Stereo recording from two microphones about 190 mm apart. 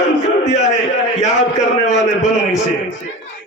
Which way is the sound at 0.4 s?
40° left (ahead or behind).